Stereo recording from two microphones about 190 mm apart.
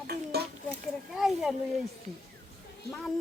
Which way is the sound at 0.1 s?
55° right (ahead or behind).